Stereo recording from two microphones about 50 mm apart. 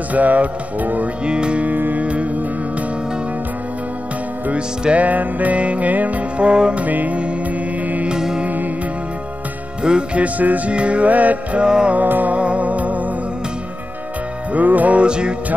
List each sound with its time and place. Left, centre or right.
0.1 s music: right
1.2 s music: right
1.7 s music: right
4.6 s music: centre
5.0 s music: right
6.8 s music: right
8.1 s music: centre
9.8 s music: right
11.6 s music: centre
11.9 s music: right
14.5 s music: right